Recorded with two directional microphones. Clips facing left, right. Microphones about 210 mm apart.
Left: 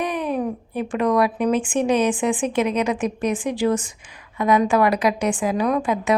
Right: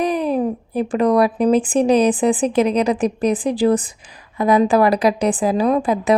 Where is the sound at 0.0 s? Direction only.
35° right (ahead or behind).